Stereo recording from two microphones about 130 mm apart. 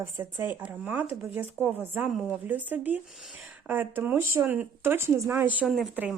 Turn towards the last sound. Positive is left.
turn(degrees=0)  # may be behind; listen again after turning